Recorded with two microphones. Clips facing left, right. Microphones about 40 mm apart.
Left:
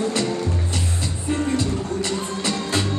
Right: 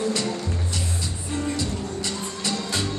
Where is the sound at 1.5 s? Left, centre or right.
Left.